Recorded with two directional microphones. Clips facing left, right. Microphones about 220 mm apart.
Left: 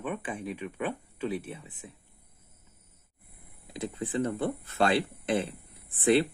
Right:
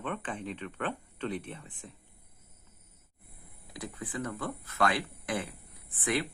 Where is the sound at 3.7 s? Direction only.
25° left (ahead or behind).